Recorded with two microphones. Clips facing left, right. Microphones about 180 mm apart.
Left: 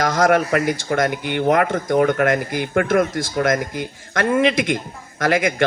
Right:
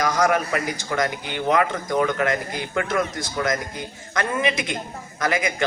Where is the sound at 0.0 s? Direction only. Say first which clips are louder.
Left 4 dB; 55° left (ahead or behind).